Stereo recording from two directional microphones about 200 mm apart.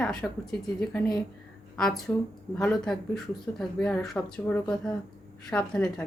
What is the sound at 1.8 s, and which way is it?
Speech, centre (ahead or behind).